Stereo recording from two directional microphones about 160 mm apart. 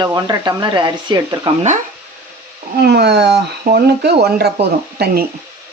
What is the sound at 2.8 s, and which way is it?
Speech, 90° right.